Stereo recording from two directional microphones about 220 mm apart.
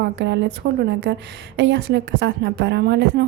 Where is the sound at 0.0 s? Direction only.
55° right (ahead or behind).